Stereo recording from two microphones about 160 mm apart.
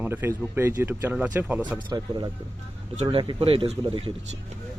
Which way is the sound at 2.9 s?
40° right (ahead or behind).